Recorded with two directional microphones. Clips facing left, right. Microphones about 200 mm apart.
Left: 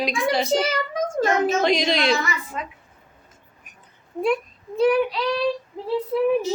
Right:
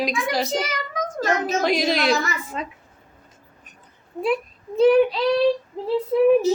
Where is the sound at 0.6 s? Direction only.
30° left (ahead or behind).